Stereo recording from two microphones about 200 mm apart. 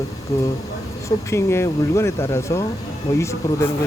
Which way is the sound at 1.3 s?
15° left (ahead or behind).